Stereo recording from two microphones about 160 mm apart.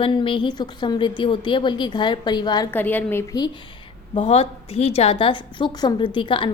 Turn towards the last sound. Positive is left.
turn(degrees=30)  # may be behind; listen again after turning